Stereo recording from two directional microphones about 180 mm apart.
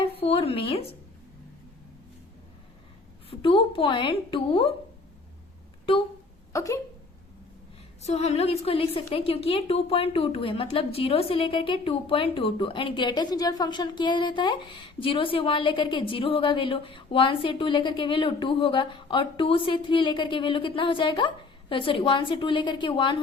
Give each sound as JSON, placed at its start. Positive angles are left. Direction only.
{"t": 0.2, "sound": "speech", "side_deg": 30}
{"t": 3.2, "sound": "a woman's voice", "side_deg": 30}
{"t": 6.5, "sound": "speech", "side_deg": 15}
{"t": 8.0, "sound": "a woman's voice", "side_deg": 35}